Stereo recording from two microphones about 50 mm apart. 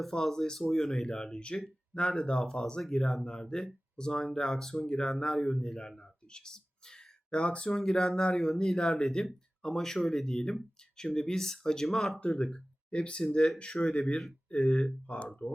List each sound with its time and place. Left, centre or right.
0.0 s speech: centre
6.0 s a sound: centre
7.7 s speech: centre
12.4 s speech: centre
13.7 s speech: centre
14.5 s speech: left